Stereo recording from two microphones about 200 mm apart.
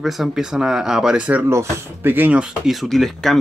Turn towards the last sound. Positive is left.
turn(degrees=0)  # may be behind; listen again after turning